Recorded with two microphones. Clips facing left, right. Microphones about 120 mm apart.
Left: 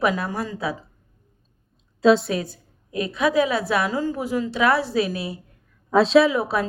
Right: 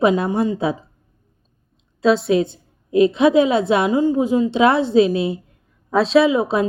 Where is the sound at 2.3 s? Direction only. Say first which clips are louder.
Right 9 dB; 25° right (ahead or behind).